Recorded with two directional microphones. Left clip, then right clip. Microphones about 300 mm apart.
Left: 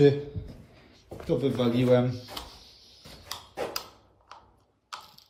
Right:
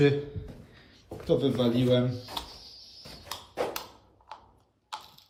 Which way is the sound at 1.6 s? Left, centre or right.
Centre.